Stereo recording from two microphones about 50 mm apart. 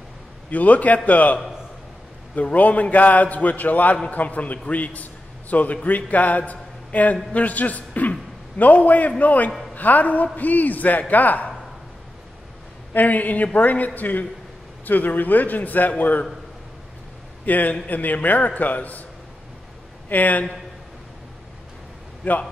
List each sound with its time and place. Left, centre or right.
0.5 s a man's voice: left
12.9 s a man's voice: left
17.5 s a man's voice: left
20.1 s a man's voice: left
22.2 s a man's voice: left